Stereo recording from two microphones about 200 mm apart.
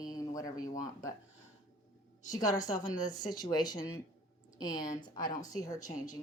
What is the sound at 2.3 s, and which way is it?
Speech, 20° left (ahead or behind).